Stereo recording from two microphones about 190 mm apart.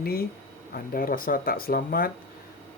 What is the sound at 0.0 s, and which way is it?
Speech, 55° left (ahead or behind).